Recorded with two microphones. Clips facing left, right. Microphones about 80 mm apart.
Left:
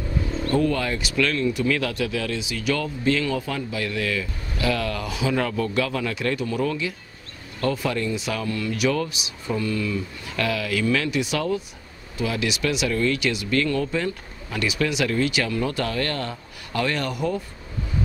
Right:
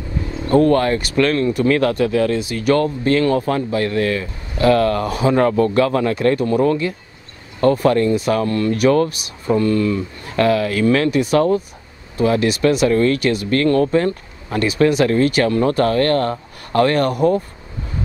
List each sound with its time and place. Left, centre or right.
0.6 s speech: right